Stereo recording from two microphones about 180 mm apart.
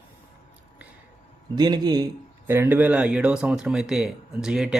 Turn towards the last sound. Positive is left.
turn(degrees=-5)  # may be behind; listen again after turning